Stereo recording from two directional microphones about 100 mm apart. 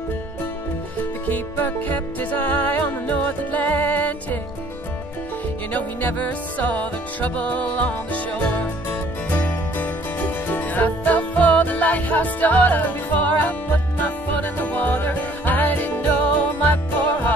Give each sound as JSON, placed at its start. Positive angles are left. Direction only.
{"t": 1.2, "sound": "music", "side_deg": 15}
{"t": 5.7, "sound": "music", "side_deg": 15}
{"t": 7.2, "sound": "music", "side_deg": 15}